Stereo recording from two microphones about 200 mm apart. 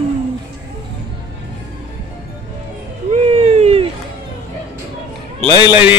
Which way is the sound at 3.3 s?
30° right (ahead or behind).